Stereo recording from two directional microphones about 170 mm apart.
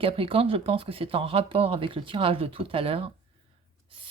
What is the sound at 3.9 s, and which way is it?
Writing, 30° right (ahead or behind).